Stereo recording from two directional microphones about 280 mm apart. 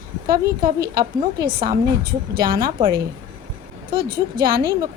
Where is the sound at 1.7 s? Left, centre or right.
Right.